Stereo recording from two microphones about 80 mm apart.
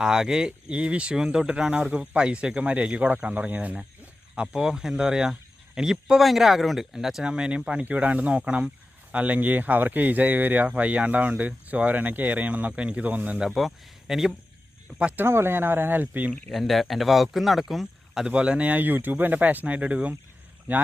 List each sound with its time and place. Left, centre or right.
0.0 s speech: centre
13.4 s speech: centre
15.2 s speech: right
16.5 s speech: centre